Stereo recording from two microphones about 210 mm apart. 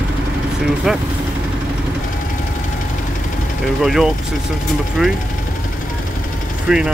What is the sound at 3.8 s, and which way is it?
Speech, centre (ahead or behind).